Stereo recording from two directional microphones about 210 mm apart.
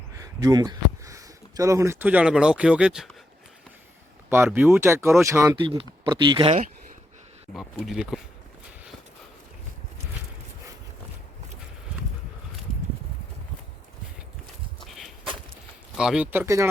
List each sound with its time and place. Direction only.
0.2 s speech: 15° right (ahead or behind)
4.3 s speech: 10° right (ahead or behind)
4.8 s speech: 10° right (ahead or behind)
7.5 s speech: centre (ahead or behind)
14.8 s walk: centre (ahead or behind)
16.0 s speech: 5° right (ahead or behind)